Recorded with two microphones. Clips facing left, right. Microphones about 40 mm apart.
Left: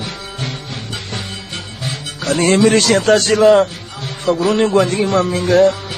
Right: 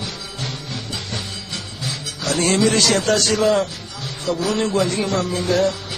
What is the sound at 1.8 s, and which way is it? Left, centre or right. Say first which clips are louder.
A man's voice: left 4 dB; left.